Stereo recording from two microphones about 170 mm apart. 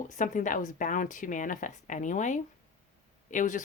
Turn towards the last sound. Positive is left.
turn(degrees=50)  # may be behind; listen again after turning